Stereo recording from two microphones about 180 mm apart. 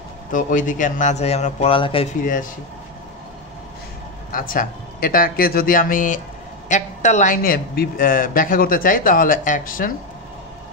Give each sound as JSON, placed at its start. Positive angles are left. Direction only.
{"t": 0.3, "sound": "a man's voice", "side_deg": 45}
{"t": 4.3, "sound": "a man's voice", "side_deg": 50}